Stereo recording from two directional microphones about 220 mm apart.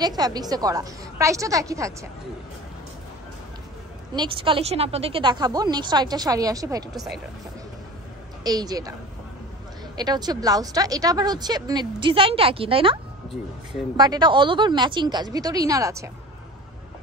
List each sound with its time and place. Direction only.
0.0 s a woman's voice: 20° right (ahead or behind)
4.1 s speech: 20° right (ahead or behind)
6.9 s speech: centre (ahead or behind)
8.5 s a woman's voice: 15° right (ahead or behind)
9.9 s speech: 20° right (ahead or behind)